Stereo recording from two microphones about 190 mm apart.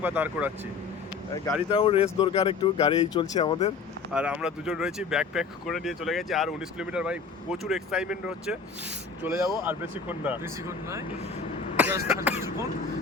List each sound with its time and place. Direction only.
0.0 s speech: 10° right (ahead or behind)
1.7 s speech: 30° left (ahead or behind)
4.1 s speech: 5° right (ahead or behind)
9.2 s speech: 15° right (ahead or behind)